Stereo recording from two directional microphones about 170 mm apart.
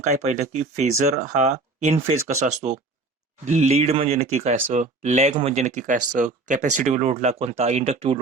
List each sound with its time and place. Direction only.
0.1 s speech: 40° right (ahead or behind)